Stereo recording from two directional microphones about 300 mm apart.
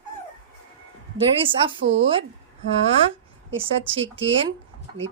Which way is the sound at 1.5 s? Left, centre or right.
Centre.